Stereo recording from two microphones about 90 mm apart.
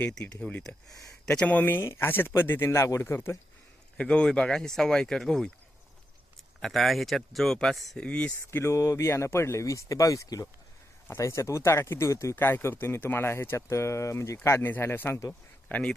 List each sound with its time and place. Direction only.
1.0 s speech: 10° left (ahead or behind); by 3.3 s 30° left (ahead or behind)
3.9 s speech: 10° left (ahead or behind)
6.6 s speech: centre (ahead or behind)
8.0 s speech: 15° left (ahead or behind)
8.4 s speech: 30° left (ahead or behind)
15.3 s speech: 10° left (ahead or behind)